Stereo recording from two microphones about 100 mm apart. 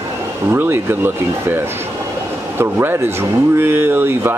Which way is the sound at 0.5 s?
20° right (ahead or behind).